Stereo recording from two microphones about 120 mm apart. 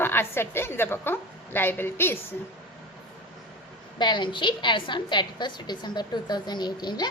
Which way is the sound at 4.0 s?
40° left (ahead or behind).